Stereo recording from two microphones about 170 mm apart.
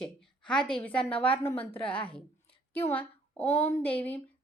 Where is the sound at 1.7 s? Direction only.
30° left (ahead or behind).